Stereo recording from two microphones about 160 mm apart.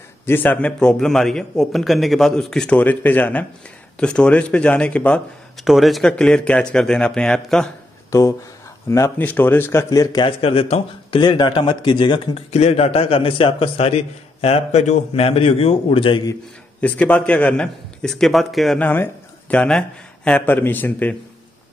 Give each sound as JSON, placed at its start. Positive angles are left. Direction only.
{"t": 0.3, "sound": "speech", "side_deg": 10}
{"t": 8.1, "sound": "speech", "side_deg": 20}
{"t": 10.4, "sound": "speech", "side_deg": 35}
{"t": 16.8, "sound": "speech", "side_deg": 10}